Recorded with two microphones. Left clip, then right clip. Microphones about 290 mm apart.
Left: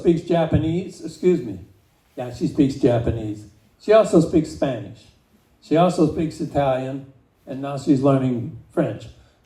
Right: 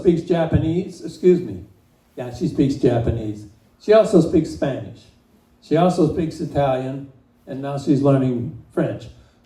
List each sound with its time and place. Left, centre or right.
0.0 s speech: left